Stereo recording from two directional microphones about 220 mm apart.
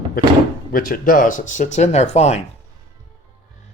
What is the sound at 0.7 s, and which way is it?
Speech, 40° left (ahead or behind).